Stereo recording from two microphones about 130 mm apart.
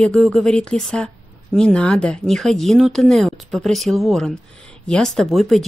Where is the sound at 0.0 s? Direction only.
5° left (ahead or behind).